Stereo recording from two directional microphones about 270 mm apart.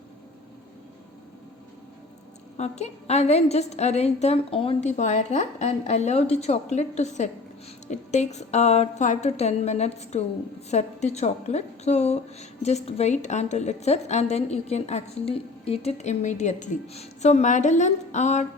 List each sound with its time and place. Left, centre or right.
2.6 s a woman's voice: left